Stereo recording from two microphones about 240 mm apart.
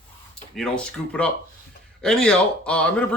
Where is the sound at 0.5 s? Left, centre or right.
Centre.